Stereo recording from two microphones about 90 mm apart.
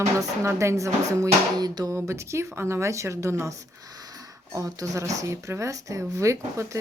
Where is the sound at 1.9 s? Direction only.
30° right (ahead or behind).